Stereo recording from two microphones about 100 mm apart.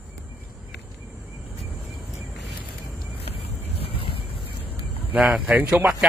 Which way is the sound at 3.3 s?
75° left (ahead or behind).